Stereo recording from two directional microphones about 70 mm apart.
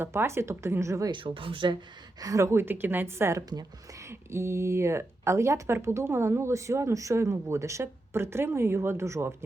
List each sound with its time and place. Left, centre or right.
0.0 s speech: right
1.6 s speech: right
2.2 s speech: right